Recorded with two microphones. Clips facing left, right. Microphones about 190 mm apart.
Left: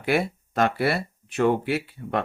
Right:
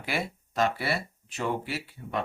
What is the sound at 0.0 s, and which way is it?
Speech, 55° left (ahead or behind).